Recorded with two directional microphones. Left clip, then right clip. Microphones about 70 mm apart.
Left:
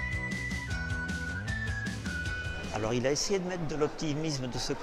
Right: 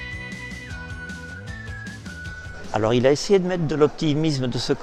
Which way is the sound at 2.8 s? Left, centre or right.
Right.